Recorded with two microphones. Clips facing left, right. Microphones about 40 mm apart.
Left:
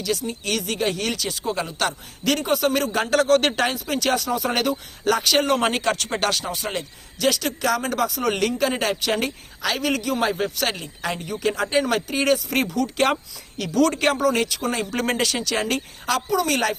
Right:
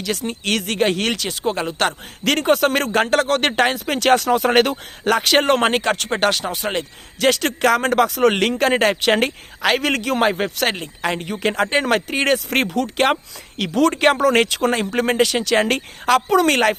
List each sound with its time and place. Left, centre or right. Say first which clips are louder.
0.1 s speech: right 3 dB; right
3.8 s speech: right 6 dB; right
6.5 s speech: right 4 dB; right
8.5 s speech: right 6 dB; right
12.7 s speech: right 2 dB; right
14.8 s speech: right 5 dB; right
15.4 s speech: right 6 dB; right